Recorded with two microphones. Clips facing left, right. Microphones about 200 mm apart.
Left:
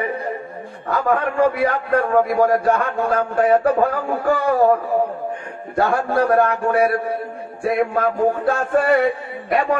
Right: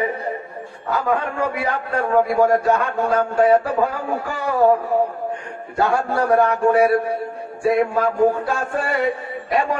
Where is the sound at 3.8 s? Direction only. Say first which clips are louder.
Left 2 dB; 50° left (ahead or behind).